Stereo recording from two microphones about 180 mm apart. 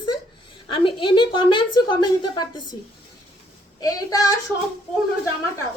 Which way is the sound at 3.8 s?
20° left (ahead or behind).